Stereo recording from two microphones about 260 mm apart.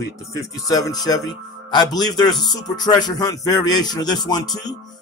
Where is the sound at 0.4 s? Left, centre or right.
Centre.